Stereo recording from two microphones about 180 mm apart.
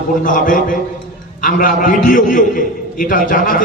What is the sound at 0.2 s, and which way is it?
A man's voice, 50° left (ahead or behind).